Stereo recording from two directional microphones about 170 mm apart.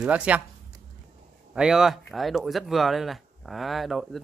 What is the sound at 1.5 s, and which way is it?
Speech, 5° right (ahead or behind).